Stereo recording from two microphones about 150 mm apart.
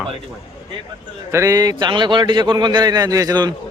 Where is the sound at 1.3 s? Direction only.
20° right (ahead or behind).